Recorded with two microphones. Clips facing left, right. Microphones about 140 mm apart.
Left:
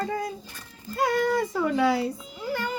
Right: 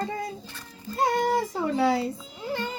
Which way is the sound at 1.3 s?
25° right (ahead or behind).